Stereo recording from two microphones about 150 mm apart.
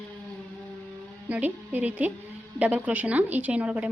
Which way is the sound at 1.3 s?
10° right (ahead or behind).